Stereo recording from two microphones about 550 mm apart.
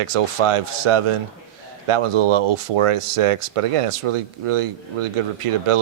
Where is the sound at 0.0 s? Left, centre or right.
Right.